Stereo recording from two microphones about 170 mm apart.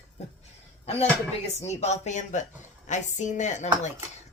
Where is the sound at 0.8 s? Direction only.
35° left (ahead or behind).